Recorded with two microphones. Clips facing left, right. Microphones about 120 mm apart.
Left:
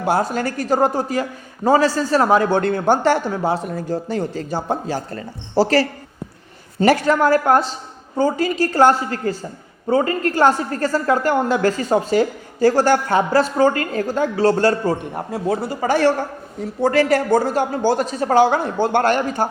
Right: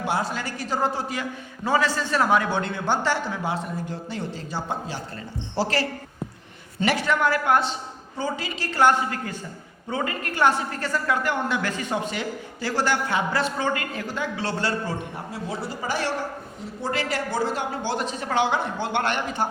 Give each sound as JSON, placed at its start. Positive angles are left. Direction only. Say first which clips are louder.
{"t": 0.0, "sound": "a man's voice", "louder": "left 7 dB", "side_deg": 45}